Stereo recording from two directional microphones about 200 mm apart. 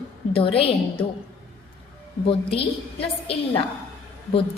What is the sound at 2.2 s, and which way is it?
Speech, 30° left (ahead or behind).